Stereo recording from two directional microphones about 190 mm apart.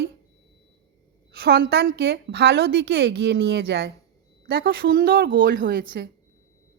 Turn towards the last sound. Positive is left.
turn(degrees=-55)  # may be behind; listen again after turning